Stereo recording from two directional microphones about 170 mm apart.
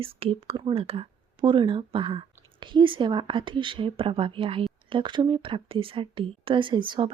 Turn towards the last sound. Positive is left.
turn(degrees=-30)  # may be behind; listen again after turning